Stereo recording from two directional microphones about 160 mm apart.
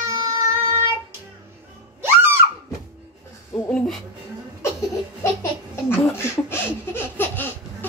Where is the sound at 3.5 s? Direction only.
5° left (ahead or behind).